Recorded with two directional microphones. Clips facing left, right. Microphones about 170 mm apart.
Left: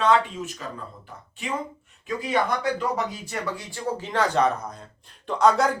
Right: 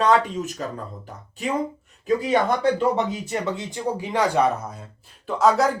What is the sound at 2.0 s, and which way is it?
Speech, 30° right (ahead or behind).